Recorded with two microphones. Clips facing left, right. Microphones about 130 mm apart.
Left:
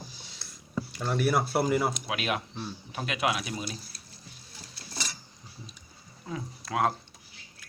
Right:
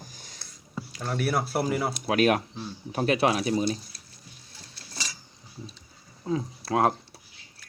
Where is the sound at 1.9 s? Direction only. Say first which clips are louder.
Right 9 dB; 40° right (ahead or behind).